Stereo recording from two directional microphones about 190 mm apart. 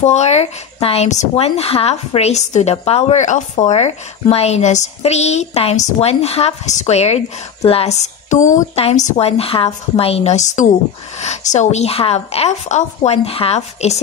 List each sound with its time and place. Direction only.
0.0 s speech: 35° left (ahead or behind)